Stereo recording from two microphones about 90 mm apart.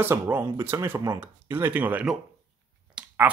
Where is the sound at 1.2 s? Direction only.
25° right (ahead or behind).